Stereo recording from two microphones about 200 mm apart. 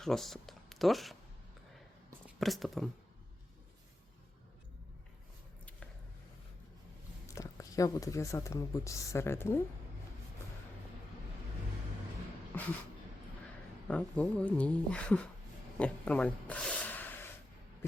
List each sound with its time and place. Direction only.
0.0 s speech: centre (ahead or behind)
2.4 s speech: centre (ahead or behind)
7.3 s speech: 15° left (ahead or behind)
13.8 s speech: 5° left (ahead or behind)
15.8 s snort: 5° left (ahead or behind)